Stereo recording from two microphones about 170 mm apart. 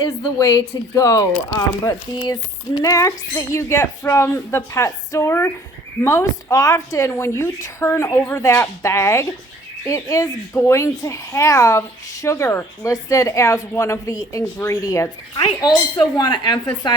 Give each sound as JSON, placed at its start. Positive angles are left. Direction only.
{"t": 0.2, "sound": "a woman's voice", "side_deg": 20}